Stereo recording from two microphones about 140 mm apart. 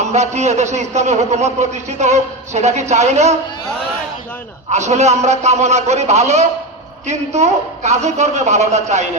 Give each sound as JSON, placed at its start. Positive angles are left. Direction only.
{"t": 0.0, "sound": "a man's voice", "side_deg": -55}
{"t": 4.7, "sound": "a man's voice", "side_deg": -55}